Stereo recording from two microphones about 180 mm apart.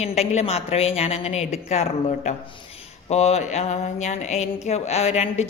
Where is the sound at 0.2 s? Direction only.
35° left (ahead or behind).